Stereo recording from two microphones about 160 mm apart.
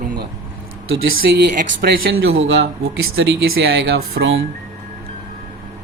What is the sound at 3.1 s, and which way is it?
Speech, 90° right.